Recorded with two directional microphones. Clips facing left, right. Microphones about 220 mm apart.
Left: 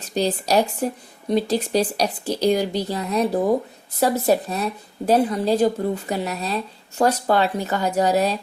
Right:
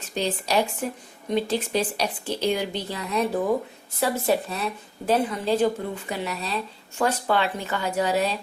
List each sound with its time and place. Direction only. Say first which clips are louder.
0.0 s a woman's voice: left 5 dB; 40° left (ahead or behind)